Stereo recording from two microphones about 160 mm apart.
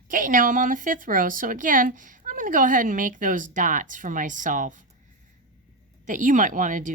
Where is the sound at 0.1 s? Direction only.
55° right (ahead or behind).